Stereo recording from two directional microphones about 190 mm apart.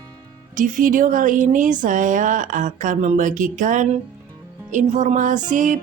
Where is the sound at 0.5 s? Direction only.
45° right (ahead or behind).